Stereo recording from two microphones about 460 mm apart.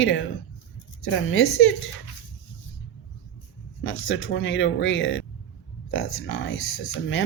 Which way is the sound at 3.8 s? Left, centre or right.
Left.